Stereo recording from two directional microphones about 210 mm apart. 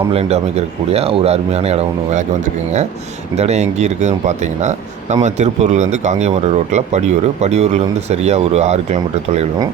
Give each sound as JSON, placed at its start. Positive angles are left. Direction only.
{"t": 0.1, "sound": "speech", "side_deg": -30}
{"t": 3.3, "sound": "speech", "side_deg": -30}